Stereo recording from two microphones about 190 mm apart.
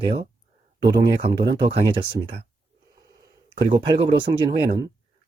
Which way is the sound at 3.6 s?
25° right (ahead or behind).